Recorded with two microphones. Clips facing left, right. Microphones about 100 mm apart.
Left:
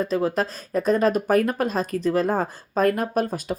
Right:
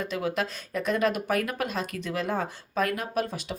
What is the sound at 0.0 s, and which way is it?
Speech, 35° left (ahead or behind).